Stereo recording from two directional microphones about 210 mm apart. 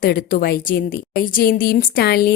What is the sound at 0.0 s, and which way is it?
A woman's voice, 40° left (ahead or behind).